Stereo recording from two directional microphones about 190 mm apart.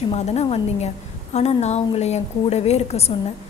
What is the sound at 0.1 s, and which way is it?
A woman's voice, 35° left (ahead or behind).